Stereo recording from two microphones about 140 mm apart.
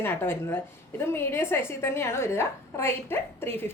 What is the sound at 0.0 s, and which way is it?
A woman's voice, 15° left (ahead or behind).